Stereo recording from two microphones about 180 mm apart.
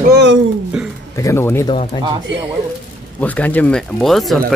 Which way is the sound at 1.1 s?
15° left (ahead or behind).